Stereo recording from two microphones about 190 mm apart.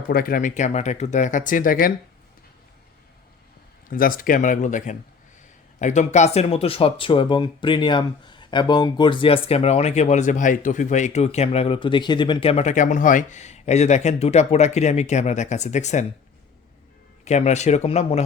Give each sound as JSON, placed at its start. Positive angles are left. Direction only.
{"t": 0.1, "sound": "speech", "side_deg": 50}
{"t": 3.8, "sound": "speech", "side_deg": 45}
{"t": 17.2, "sound": "speech", "side_deg": 35}